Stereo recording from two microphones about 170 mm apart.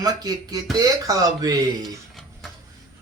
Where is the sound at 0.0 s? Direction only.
20° right (ahead or behind).